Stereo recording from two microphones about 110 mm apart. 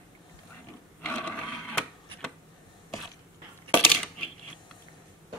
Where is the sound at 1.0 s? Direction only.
15° left (ahead or behind).